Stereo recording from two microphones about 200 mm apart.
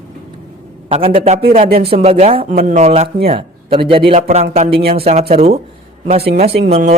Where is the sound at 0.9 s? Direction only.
30° right (ahead or behind).